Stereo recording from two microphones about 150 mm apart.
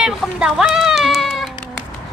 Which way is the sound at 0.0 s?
5° right (ahead or behind).